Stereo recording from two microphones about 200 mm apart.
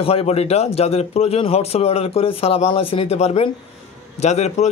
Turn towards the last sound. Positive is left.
turn(degrees=35)  # may be behind; listen again after turning